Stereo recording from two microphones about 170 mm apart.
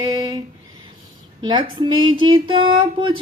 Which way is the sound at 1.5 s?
25° right (ahead or behind).